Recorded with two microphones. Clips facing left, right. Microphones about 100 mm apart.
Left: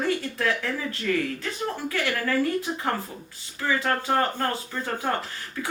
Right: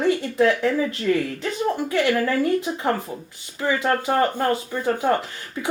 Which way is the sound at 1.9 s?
20° right (ahead or behind).